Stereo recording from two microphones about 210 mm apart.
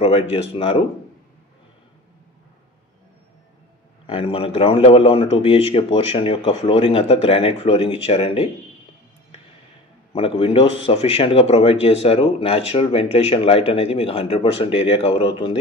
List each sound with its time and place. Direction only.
0.0 s speech: 30° left (ahead or behind)
4.1 s speech: 25° left (ahead or behind)
10.1 s speech: 25° left (ahead or behind)